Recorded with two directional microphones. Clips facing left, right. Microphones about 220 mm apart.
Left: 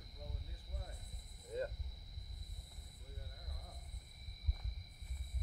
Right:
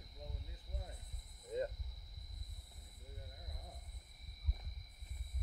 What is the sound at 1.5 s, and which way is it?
Cricket, 20° right (ahead or behind).